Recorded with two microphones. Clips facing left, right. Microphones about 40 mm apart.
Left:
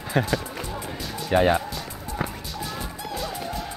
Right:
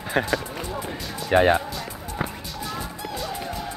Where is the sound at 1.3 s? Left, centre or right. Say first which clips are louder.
Right 2 dB; centre.